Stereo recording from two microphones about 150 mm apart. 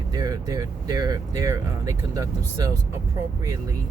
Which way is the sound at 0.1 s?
25° right (ahead or behind).